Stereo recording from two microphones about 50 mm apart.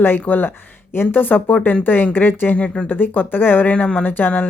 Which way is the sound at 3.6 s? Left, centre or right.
Left.